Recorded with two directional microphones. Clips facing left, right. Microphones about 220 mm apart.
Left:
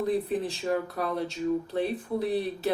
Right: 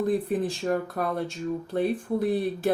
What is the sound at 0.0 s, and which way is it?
Speech, 50° right (ahead or behind).